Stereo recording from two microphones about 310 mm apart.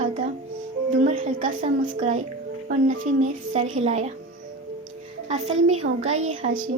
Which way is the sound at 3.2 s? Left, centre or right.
Right.